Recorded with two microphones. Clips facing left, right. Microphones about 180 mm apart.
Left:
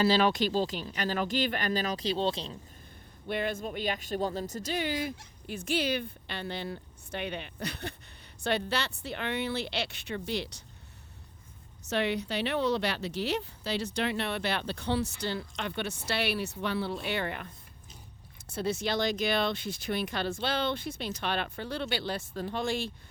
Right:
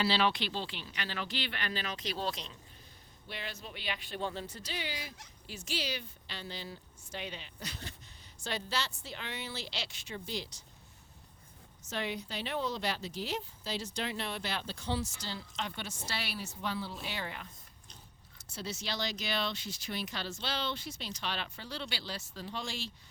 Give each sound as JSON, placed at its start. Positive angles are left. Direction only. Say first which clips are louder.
{"t": 0.0, "sound": "speech", "louder": "left 6 dB", "side_deg": 45}
{"t": 3.2, "sound": "a woman's voice", "louder": "left 12 dB", "side_deg": 55}
{"t": 11.8, "sound": "a woman's voice", "louder": "left 8 dB", "side_deg": 70}